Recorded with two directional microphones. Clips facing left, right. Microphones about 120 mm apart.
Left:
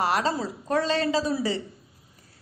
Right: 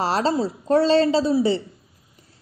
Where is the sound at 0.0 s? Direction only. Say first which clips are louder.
Right 4 dB; 30° right (ahead or behind).